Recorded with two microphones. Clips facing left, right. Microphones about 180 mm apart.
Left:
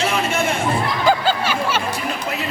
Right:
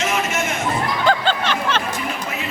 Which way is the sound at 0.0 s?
30° left (ahead or behind).